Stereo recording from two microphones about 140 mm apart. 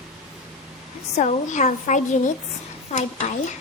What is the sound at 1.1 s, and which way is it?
A woman's voice, 60° left (ahead or behind).